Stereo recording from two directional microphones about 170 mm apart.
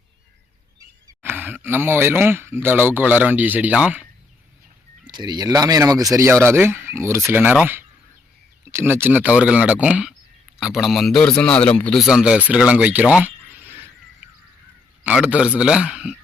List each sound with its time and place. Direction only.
1.0 s speech: 10° right (ahead or behind)
5.0 s a man's voice: 25° right (ahead or behind); by 13.7 s 10° right (ahead or behind)
15.0 s a man's voice: 10° right (ahead or behind)